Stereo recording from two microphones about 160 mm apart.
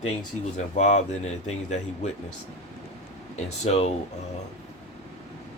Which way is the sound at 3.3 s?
45° left (ahead or behind).